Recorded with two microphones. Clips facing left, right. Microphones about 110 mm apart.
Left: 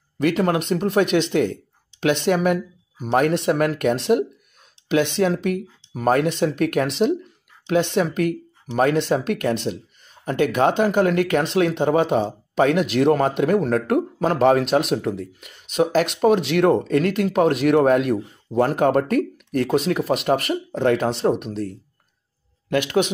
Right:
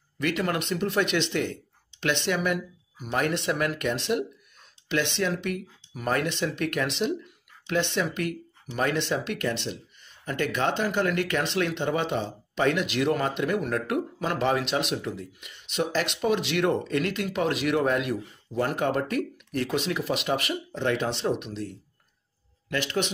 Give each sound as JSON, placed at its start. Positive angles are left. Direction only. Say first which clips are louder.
{"t": 0.2, "sound": "speech", "louder": "left 8 dB", "side_deg": 45}
{"t": 22.8, "sound": "speech", "louder": "left 8 dB", "side_deg": 50}